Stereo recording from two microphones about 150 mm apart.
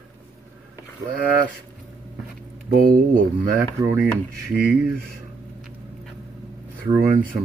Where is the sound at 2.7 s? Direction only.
65° right (ahead or behind).